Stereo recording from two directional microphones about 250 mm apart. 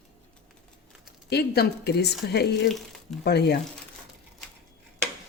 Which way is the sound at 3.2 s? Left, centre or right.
Left.